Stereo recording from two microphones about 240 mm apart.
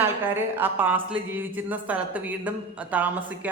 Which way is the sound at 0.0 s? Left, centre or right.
Centre.